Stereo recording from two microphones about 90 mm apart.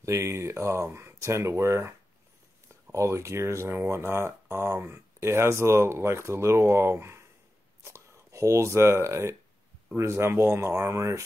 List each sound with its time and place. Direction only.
0.0 s speech: 30° right (ahead or behind)